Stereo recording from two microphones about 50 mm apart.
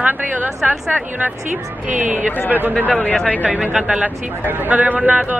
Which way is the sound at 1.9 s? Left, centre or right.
Right.